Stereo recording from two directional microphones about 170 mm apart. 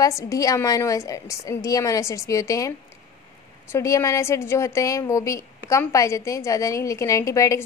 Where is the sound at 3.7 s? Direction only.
20° left (ahead or behind).